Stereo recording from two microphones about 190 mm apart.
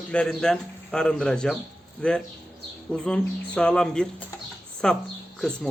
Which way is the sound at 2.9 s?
5° left (ahead or behind).